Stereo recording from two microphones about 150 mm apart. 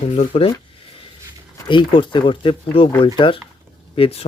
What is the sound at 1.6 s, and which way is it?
Speech, 35° left (ahead or behind).